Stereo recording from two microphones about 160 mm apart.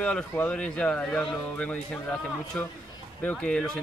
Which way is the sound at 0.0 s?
10° left (ahead or behind).